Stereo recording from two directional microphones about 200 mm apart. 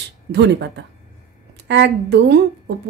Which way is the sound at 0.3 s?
60° right (ahead or behind).